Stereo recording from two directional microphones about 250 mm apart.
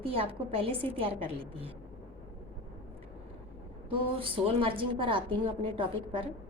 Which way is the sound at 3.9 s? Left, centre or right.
Right.